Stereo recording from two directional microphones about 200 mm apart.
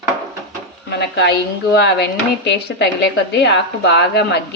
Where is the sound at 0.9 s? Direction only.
55° left (ahead or behind).